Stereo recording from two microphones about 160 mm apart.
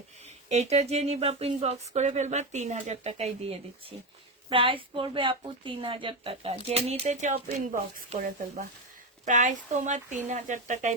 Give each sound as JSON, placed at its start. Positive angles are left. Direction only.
{"t": 0.5, "sound": "speech", "side_deg": -45}
{"t": 9.2, "sound": "speech", "side_deg": -50}